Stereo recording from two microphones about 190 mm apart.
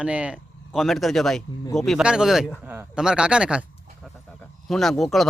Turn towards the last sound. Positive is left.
turn(degrees=0)  # may be behind; listen again after turning